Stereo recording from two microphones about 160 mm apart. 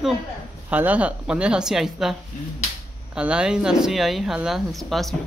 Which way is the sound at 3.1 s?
5° right (ahead or behind).